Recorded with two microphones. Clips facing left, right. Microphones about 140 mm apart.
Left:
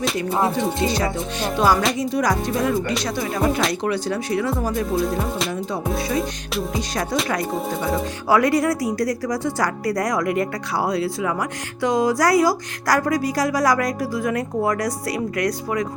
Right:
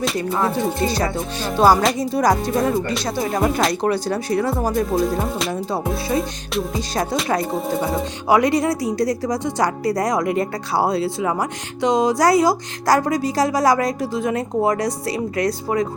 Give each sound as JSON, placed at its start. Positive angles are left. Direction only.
{"t": 0.3, "sound": "music", "side_deg": 25}
{"t": 0.9, "sound": "speech", "side_deg": -35}
{"t": 5.9, "sound": "music", "side_deg": 0}
{"t": 6.9, "sound": "a woman's voice", "side_deg": -30}
{"t": 8.3, "sound": "a woman's voice", "side_deg": -20}